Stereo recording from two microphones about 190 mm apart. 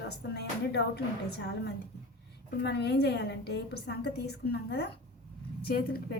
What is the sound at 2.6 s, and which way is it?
A woman's voice, 60° left (ahead or behind).